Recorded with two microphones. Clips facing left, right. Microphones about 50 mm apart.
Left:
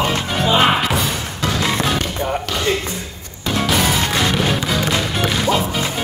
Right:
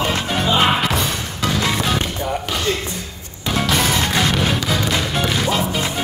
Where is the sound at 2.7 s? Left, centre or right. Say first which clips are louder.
Left 3 dB; centre.